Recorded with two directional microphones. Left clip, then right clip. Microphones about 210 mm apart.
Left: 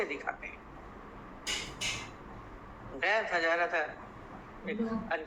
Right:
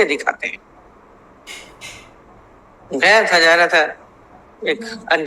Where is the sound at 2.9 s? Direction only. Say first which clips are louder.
Right 18 dB; 60° right (ahead or behind).